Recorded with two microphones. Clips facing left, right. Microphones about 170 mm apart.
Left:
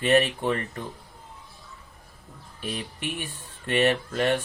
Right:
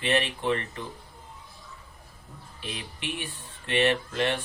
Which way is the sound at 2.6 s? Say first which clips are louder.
Left 4 dB; 45° left (ahead or behind).